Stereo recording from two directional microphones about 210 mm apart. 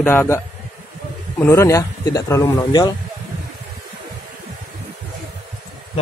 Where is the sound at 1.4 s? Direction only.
15° left (ahead or behind).